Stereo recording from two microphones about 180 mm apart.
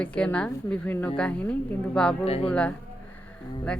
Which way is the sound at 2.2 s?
35° left (ahead or behind).